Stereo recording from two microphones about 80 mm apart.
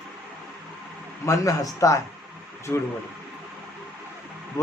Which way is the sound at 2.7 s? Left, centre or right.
Centre.